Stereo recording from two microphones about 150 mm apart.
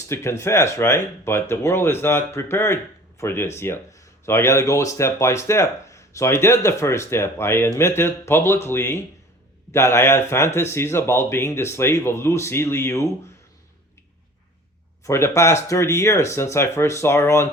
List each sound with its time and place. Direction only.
0.1 s speech: 20° left (ahead or behind)
15.0 s speech: 20° left (ahead or behind)